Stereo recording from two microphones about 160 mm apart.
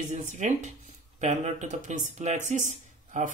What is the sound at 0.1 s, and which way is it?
Speech, 50° right (ahead or behind).